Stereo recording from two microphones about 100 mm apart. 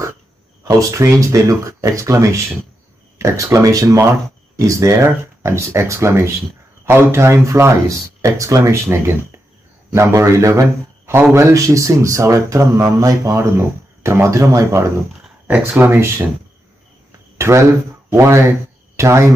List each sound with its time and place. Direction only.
0.7 s speech: 35° right (ahead or behind)
15.4 s speech: 15° right (ahead or behind)
17.4 s speech: 30° right (ahead or behind)